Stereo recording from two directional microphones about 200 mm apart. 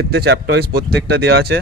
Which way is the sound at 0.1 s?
55° right (ahead or behind).